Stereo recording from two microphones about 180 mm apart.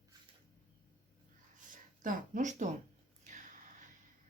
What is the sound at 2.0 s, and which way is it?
Speech, 45° right (ahead or behind).